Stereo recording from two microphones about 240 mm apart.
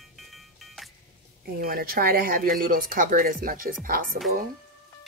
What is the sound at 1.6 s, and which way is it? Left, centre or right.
Speech, right.